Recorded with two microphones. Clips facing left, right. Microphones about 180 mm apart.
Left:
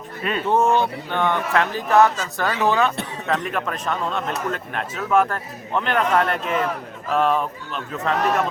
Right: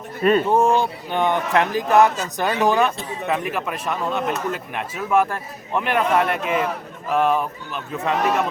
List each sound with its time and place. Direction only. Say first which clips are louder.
0.2 s speech: right 9 dB; 45° right (ahead or behind)
0.5 s speech: right 1 dB; 10° right (ahead or behind)